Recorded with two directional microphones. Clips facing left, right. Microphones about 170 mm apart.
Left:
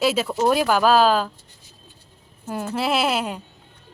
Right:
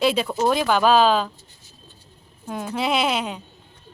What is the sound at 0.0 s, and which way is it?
A woman's voice, 5° left (ahead or behind).